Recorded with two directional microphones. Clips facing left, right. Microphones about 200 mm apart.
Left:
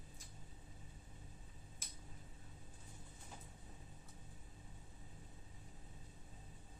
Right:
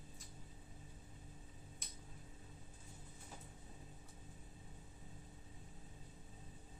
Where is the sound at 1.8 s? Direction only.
Centre (ahead or behind).